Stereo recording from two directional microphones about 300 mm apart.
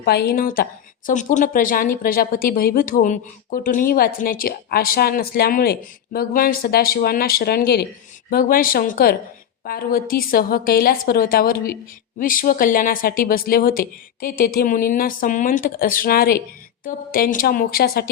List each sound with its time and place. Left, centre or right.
0.0 s speech: left